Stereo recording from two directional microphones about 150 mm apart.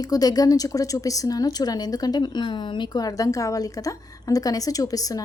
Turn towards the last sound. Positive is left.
turn(degrees=25)  # may be behind; listen again after turning